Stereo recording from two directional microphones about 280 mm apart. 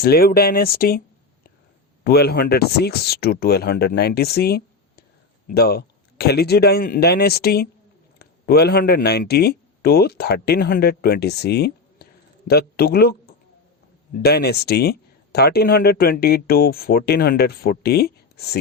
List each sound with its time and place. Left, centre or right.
0.0 s speech: left
2.0 s a man's voice: left